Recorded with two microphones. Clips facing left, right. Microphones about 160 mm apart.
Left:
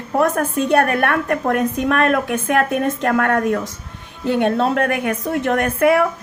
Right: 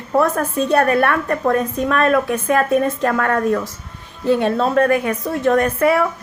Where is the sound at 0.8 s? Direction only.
60° left (ahead or behind).